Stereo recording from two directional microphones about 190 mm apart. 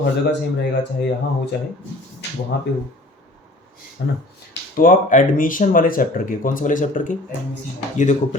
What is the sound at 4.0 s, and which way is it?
Speech, 55° left (ahead or behind).